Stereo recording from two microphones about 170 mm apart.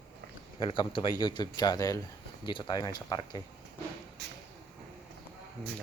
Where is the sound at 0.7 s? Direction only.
30° left (ahead or behind).